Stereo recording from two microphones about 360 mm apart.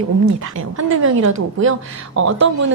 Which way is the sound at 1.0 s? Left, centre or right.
Right.